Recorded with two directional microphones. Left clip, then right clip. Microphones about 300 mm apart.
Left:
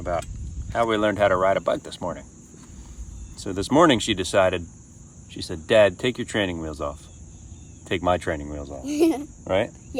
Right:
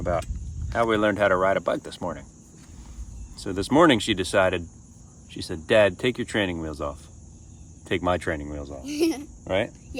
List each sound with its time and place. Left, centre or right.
0.0 s speech: centre
3.3 s speech: centre
8.8 s speech: centre
9.4 s speech: centre